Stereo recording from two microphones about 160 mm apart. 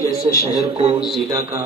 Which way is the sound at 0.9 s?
Centre (ahead or behind).